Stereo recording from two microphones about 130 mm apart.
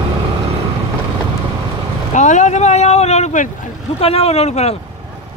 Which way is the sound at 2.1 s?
70° left (ahead or behind).